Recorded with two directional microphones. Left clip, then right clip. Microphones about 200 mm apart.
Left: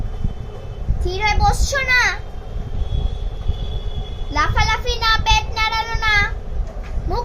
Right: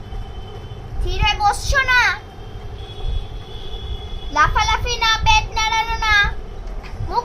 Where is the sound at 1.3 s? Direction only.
15° right (ahead or behind).